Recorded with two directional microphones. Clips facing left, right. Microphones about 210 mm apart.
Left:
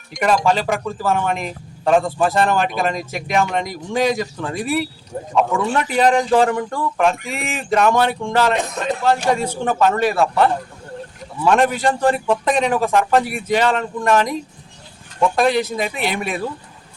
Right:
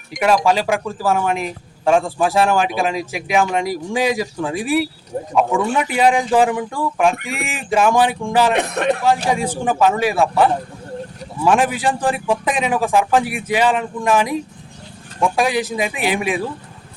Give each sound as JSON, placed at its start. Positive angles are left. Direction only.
{"t": 0.1, "sound": "a man's voice", "side_deg": -5}
{"t": 8.5, "sound": "speech", "side_deg": -65}
{"t": 9.0, "sound": "a man's voice", "side_deg": -10}